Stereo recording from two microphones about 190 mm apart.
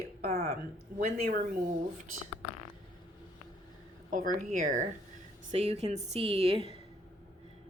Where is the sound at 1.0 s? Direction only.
35° right (ahead or behind).